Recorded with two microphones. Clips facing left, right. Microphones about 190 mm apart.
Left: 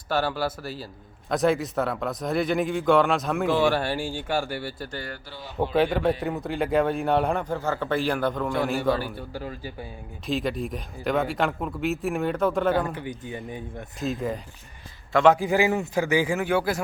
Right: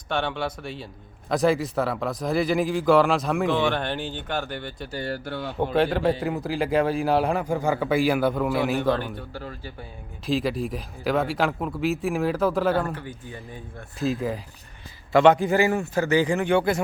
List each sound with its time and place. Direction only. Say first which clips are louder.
0.1 s a man's voice: left 1 dB; 5° left (ahead or behind)
5.2 s a man's voice: right 2 dB; 60° right (ahead or behind)
5.7 s a man's voice: even; centre (ahead or behind)
10.2 s a man's voice: right 2 dB; centre (ahead or behind)
12.9 s a man's voice: left 2 dB; 15° left (ahead or behind)
14.0 s a man's voice: right 2 dB; centre (ahead or behind)